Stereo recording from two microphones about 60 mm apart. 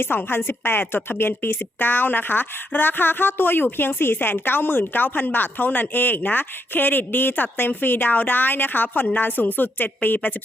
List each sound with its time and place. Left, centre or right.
0.0 s a woman's voice: left